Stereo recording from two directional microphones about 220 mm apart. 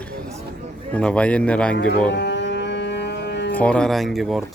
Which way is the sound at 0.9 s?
5° left (ahead or behind).